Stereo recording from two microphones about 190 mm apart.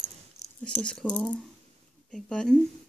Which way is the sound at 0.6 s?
5° left (ahead or behind).